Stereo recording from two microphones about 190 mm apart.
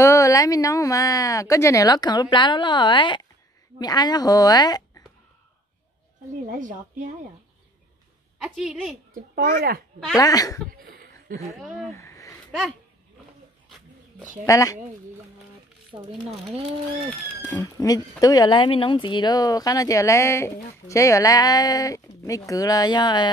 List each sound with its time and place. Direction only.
0.0 s a woman's voice: 15° left (ahead or behind)
6.4 s a child's voice: 40° right (ahead or behind)
8.4 s a woman's voice: centre (ahead or behind)
9.1 s a child's voice: 50° right (ahead or behind)
10.1 s speech: 20° left (ahead or behind)
10.8 s chuckle: 50° right (ahead or behind)
11.5 s a woman's voice: centre (ahead or behind)
11.9 s a sound: 15° left (ahead or behind)
14.4 s a woman's voice: 15° left (ahead or behind)
17.6 s speech: 20° left (ahead or behind)